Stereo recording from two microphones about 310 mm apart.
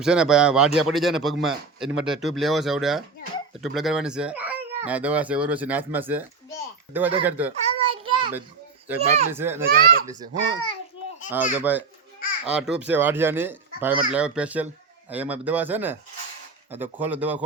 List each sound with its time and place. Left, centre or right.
0.0 s speech: centre
7.6 s child singing: centre
9.0 s a child's voice: right
9.3 s a child's voice: centre
9.6 s a child's voice: right
10.1 s a child's voice: centre
11.7 s speech: centre